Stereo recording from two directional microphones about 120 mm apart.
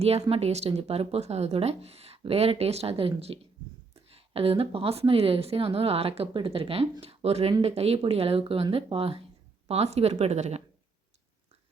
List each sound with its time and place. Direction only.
0.0 s a woman's voice: 55° right (ahead or behind)